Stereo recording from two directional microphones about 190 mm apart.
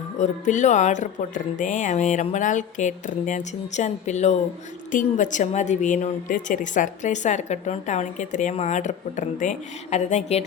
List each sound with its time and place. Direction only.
0.2 s a woman's voice: 40° left (ahead or behind)